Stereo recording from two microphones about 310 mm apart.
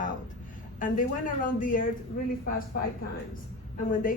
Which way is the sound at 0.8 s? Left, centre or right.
Left.